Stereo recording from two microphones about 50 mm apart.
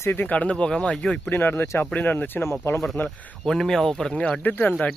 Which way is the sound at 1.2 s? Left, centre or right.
Left.